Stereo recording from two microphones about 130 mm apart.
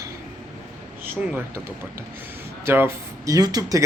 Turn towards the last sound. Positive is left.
turn(degrees=-30)  # may be behind; listen again after turning